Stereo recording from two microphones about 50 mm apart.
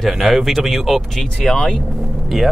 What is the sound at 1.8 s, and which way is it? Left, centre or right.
Speech, centre.